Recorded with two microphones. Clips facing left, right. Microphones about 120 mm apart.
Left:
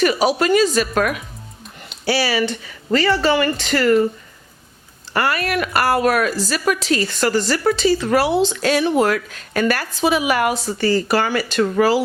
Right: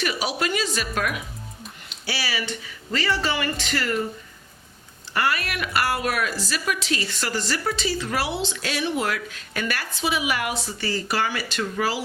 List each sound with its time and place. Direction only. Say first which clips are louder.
0.0 s a woman's voice: left 9 dB; 45° left (ahead or behind)
2.0 s a woman's voice: left 10 dB; 60° left (ahead or behind)
5.1 s a woman's voice: left 6 dB; 50° left (ahead or behind)